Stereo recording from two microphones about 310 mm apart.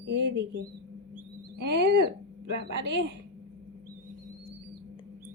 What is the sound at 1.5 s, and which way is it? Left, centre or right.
Speech, right.